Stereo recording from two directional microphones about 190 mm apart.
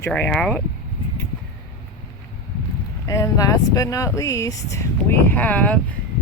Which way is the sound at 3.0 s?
15° left (ahead or behind).